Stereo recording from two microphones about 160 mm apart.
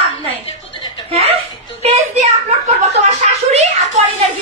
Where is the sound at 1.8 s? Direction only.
40° right (ahead or behind).